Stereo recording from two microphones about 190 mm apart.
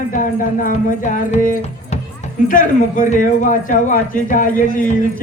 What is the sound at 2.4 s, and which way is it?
A man's voice, 45° left (ahead or behind).